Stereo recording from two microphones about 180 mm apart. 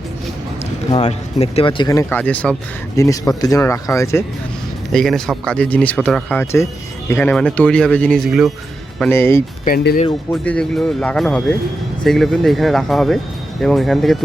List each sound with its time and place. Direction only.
1.0 s speech: 35° left (ahead or behind); by 4.2 s 15° left (ahead or behind)
4.9 s speech: centre (ahead or behind)
9.0 s speech: 10° left (ahead or behind)
9.6 s speech: 55° left (ahead or behind)
10.3 s speech: 5° left (ahead or behind)